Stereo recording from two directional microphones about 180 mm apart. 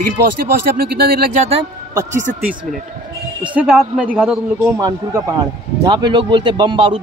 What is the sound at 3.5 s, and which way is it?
Speech, 5° right (ahead or behind).